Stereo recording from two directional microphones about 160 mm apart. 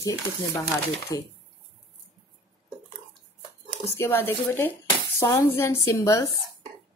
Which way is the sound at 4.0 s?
15° left (ahead or behind).